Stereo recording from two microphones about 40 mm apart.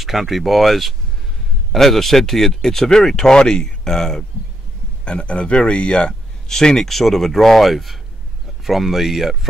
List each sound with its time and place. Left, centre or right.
0.0 s speech: centre
5.0 s speech: left
6.5 s speech: centre